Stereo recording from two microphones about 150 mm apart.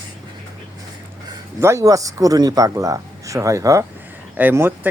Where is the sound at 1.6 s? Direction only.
20° right (ahead or behind).